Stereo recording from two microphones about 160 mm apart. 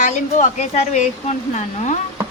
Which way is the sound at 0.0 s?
45° left (ahead or behind).